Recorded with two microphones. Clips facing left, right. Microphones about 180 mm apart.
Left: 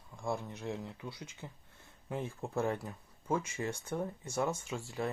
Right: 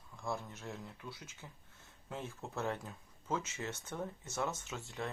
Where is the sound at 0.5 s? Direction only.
15° left (ahead or behind).